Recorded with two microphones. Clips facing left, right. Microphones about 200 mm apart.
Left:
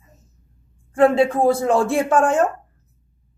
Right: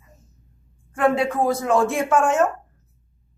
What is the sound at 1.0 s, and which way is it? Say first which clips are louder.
A woman's voice: left 5 dB; 30° left (ahead or behind).